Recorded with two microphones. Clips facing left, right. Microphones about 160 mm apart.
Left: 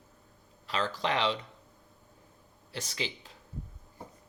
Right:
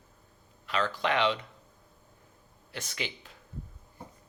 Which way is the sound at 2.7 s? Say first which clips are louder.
Left 1 dB; 35° left (ahead or behind).